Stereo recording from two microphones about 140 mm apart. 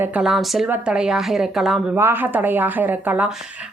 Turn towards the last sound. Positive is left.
turn(degrees=-10)  # may be behind; listen again after turning